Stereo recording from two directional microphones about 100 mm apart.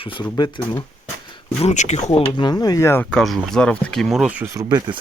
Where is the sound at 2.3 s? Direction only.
45° left (ahead or behind).